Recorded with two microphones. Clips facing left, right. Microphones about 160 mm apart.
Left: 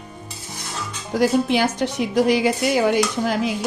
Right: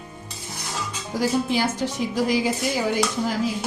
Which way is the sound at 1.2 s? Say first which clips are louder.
Left 4 dB; 70° left (ahead or behind).